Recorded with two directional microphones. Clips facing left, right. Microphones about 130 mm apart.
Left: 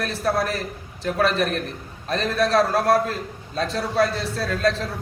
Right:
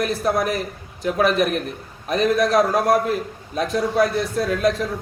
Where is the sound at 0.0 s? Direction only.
15° right (ahead or behind).